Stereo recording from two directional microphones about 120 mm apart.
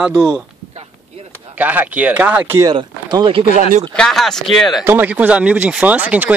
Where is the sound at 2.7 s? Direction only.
45° right (ahead or behind).